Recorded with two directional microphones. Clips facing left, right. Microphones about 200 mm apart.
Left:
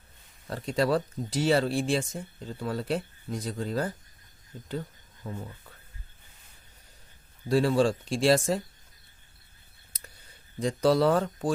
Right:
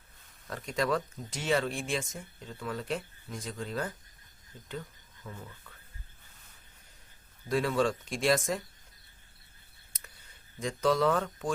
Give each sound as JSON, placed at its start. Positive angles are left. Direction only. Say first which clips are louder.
{"t": 0.4, "sound": "speech", "louder": "left 5 dB", "side_deg": 30}
{"t": 7.4, "sound": "speech", "louder": "left 5 dB", "side_deg": 30}
{"t": 9.9, "sound": "clicking", "louder": "left 4 dB", "side_deg": 35}
{"t": 10.6, "sound": "speech", "louder": "left 4 dB", "side_deg": 35}